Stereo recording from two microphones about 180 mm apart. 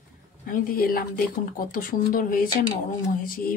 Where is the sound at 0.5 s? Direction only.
50° left (ahead or behind).